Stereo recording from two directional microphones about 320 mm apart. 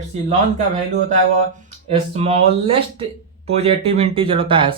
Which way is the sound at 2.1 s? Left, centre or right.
Centre.